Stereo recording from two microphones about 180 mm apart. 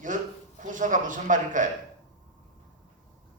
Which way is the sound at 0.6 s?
45° right (ahead or behind).